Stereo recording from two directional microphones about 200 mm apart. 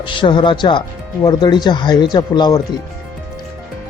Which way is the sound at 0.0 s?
25° left (ahead or behind).